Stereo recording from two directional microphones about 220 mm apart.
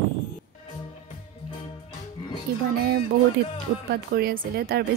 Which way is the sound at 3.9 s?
45° right (ahead or behind).